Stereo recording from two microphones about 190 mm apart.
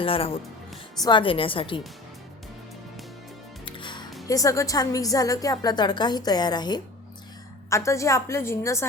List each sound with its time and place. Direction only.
0.0 s a woman's voice: 30° left (ahead or behind)
3.7 s music: 25° left (ahead or behind)
4.3 s a woman's voice: 15° left (ahead or behind)